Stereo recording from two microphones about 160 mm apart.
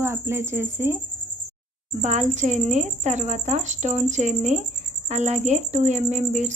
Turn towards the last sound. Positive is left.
turn(degrees=-50)  # may be behind; listen again after turning